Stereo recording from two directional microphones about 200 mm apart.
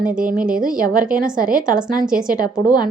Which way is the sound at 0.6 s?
45° right (ahead or behind).